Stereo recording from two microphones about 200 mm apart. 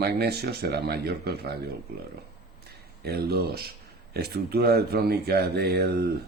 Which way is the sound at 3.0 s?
50° right (ahead or behind).